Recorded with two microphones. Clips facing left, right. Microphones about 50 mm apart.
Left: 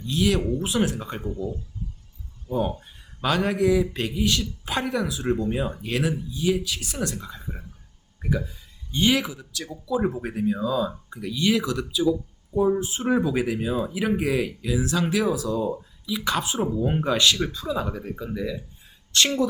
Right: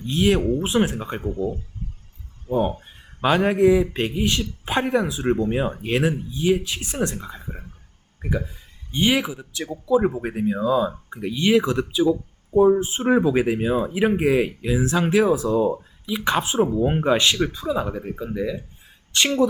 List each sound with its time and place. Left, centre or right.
0.0 s speech: right